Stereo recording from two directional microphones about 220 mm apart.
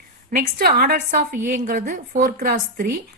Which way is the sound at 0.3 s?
40° right (ahead or behind).